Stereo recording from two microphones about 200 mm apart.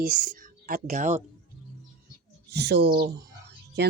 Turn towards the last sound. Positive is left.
turn(degrees=-55)  # may be behind; listen again after turning